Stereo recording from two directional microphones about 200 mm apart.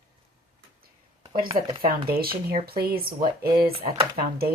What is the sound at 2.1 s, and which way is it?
Speech, 50° right (ahead or behind).